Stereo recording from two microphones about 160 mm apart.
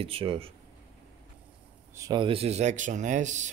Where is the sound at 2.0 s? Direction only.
25° right (ahead or behind); by 3.4 s 50° right (ahead or behind).